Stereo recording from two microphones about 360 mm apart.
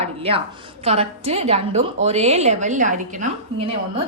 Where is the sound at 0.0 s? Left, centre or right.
Centre.